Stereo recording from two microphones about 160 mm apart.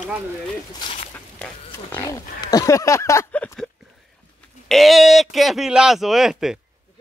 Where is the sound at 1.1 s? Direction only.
10° left (ahead or behind).